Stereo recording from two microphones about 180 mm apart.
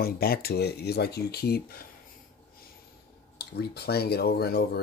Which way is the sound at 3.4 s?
60° left (ahead or behind).